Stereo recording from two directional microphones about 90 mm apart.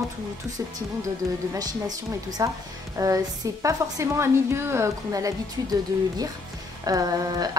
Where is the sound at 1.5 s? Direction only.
45° right (ahead or behind).